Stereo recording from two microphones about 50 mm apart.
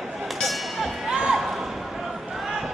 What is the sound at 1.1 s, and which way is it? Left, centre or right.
Music, centre.